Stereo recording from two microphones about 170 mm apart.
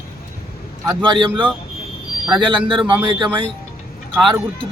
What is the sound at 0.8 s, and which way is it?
Speech, 25° right (ahead or behind).